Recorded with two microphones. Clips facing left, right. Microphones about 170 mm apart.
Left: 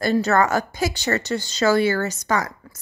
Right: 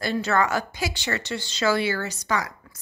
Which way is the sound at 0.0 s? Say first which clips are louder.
Left 5 dB; 40° left (ahead or behind).